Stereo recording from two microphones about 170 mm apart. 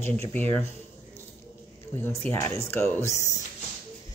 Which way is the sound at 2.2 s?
5° left (ahead or behind).